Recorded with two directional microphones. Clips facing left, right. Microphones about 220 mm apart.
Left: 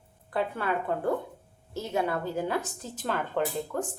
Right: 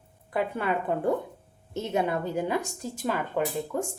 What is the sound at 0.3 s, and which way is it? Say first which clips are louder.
A woman's voice: right 2 dB; 15° right (ahead or behind).